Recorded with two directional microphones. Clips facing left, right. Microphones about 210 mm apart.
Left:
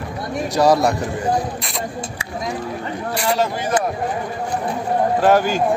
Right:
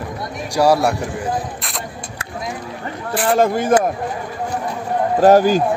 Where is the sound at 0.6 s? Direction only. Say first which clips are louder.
Right 1 dB; 10° right (ahead or behind).